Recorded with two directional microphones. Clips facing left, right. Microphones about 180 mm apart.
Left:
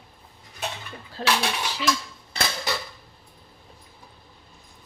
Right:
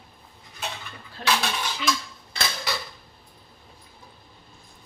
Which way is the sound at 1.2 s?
35° left (ahead or behind).